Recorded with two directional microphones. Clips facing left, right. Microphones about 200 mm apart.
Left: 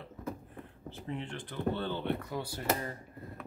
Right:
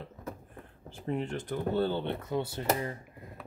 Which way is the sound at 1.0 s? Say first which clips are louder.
Right 7 dB; 40° right (ahead or behind).